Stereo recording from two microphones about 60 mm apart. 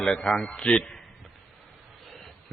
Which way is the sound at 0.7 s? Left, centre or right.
Centre.